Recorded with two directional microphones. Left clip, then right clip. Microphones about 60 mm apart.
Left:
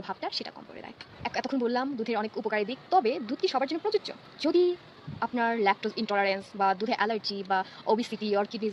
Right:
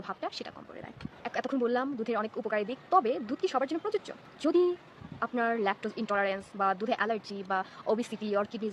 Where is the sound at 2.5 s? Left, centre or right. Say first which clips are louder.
Left 1 dB; right.